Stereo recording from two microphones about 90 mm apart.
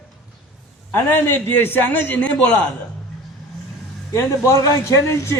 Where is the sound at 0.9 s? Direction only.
25° left (ahead or behind).